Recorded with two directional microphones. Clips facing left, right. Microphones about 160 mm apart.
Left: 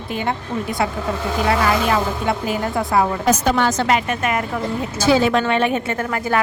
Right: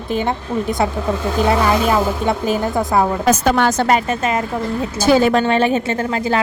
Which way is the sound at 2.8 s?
20° right (ahead or behind).